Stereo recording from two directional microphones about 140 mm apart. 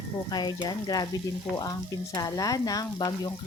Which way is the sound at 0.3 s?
30° left (ahead or behind).